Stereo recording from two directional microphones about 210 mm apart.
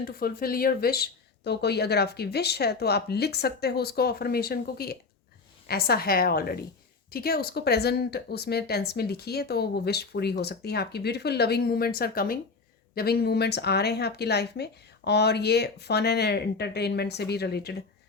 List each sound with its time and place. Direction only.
0.0 s speech: 45° left (ahead or behind)